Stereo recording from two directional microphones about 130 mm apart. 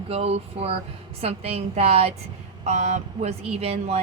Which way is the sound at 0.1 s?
50° right (ahead or behind).